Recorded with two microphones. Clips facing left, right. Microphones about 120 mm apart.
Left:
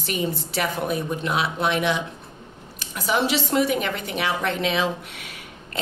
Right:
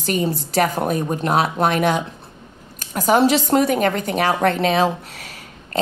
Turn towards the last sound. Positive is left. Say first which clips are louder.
# right 6 dB
turn(degrees=-40)  # may be behind; listen again after turning